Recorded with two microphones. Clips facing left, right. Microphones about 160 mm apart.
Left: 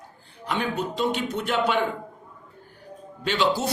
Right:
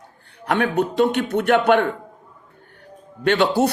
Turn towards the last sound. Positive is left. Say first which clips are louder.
# right 6 dB
turn(degrees=-60)  # may be behind; listen again after turning